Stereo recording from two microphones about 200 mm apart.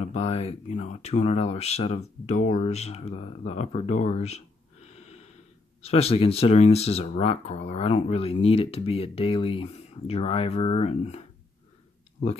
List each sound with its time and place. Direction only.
0.0 s speech: 30° left (ahead or behind)
5.8 s speech: 30° left (ahead or behind)